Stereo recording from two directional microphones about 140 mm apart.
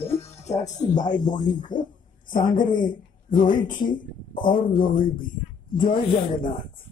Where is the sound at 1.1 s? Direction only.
70° left (ahead or behind).